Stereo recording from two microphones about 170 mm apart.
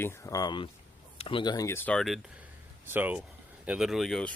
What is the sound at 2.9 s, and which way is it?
Speech, 10° right (ahead or behind).